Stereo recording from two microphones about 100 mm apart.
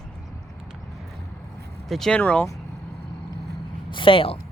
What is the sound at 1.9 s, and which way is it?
Speech, 5° left (ahead or behind).